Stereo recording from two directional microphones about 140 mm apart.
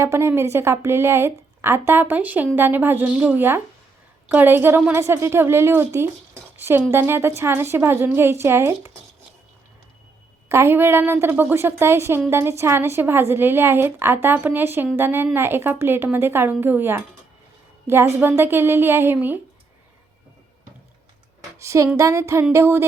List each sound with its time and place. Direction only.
0.0 s a woman's voice: 20° right (ahead or behind)
10.5 s a woman's voice: 15° right (ahead or behind)
21.6 s a sound: 20° right (ahead or behind)